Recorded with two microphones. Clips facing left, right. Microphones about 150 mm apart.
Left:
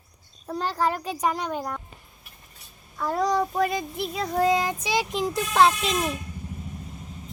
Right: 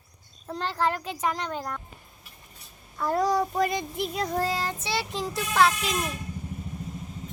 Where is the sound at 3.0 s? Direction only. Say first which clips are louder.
Even; 5° right (ahead or behind).